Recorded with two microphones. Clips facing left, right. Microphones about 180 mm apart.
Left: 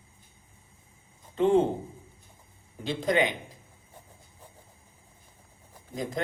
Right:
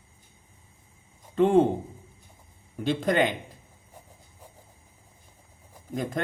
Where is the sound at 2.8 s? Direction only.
55° right (ahead or behind).